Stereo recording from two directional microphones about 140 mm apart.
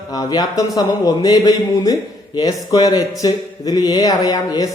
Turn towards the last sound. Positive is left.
turn(degrees=25)  # may be behind; listen again after turning